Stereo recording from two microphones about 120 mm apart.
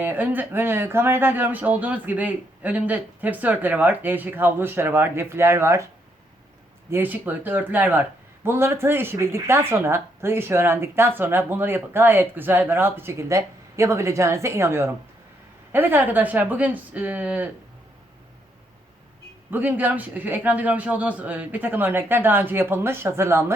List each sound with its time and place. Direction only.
0.0 s speech: 15° right (ahead or behind)
6.9 s speech: 15° right (ahead or behind)
19.5 s speech: 15° right (ahead or behind)